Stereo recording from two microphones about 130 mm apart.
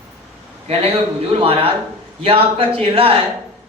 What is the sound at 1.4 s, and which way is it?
A man's voice, 45° right (ahead or behind).